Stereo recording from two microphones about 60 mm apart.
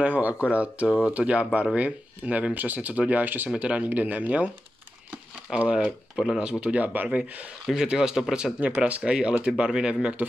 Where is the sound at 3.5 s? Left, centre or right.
Centre.